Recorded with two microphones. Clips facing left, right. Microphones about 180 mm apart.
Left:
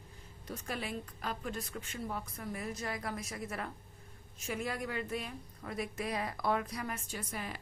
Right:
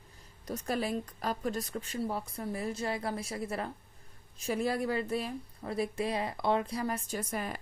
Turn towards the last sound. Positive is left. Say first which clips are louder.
# right 6 dB
turn(degrees=-45)  # may be behind; listen again after turning